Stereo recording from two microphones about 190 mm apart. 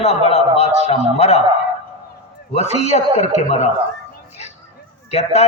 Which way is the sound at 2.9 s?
35° left (ahead or behind).